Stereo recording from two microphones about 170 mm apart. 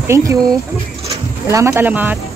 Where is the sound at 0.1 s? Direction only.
20° right (ahead or behind).